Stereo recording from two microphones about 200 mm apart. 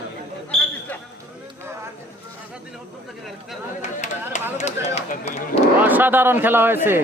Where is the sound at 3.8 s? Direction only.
35° left (ahead or behind).